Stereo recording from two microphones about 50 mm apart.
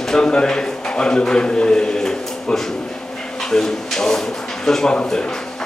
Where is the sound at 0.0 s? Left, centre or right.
Centre.